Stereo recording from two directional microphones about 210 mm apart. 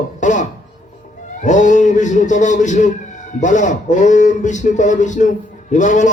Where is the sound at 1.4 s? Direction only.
35° left (ahead or behind).